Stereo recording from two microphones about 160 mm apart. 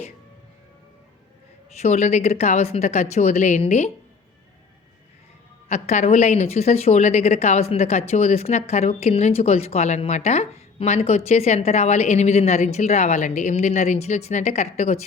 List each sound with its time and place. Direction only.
1.8 s a woman's voice: 45° left (ahead or behind)
5.6 s a woman's voice: 45° left (ahead or behind)